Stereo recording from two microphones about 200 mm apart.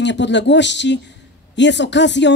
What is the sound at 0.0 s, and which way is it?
A man's voice, 60° left (ahead or behind).